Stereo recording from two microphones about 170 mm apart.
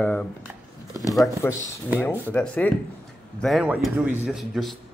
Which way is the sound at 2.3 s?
10° left (ahead or behind).